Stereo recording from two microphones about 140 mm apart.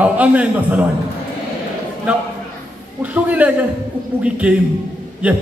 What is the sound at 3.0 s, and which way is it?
A man's voice, 10° right (ahead or behind).